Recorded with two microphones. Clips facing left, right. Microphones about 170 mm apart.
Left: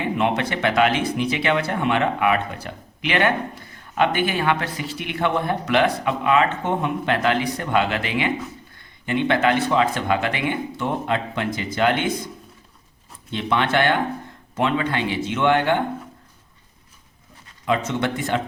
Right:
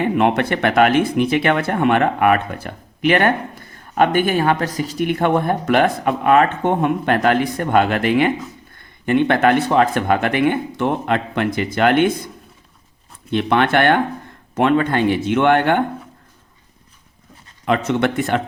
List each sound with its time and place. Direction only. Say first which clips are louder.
0.0 s speech: right 5 dB; 55° right (ahead or behind)
13.3 s speech: right 5 dB; 60° right (ahead or behind)
17.7 s speech: right 4 dB; 60° right (ahead or behind)